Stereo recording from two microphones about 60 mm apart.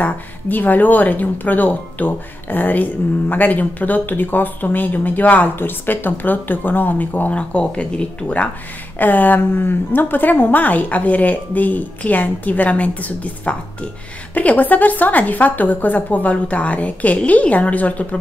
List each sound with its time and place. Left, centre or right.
0.0 s speech: left